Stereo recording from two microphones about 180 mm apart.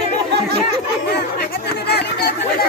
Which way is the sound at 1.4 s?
65° left (ahead or behind).